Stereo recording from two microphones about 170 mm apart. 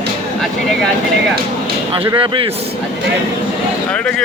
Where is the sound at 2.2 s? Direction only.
30° right (ahead or behind).